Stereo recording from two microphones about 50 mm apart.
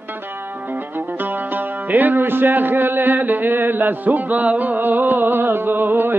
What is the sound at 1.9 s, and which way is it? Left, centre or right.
Speech, right.